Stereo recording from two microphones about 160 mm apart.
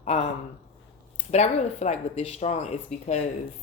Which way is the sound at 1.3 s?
45° left (ahead or behind).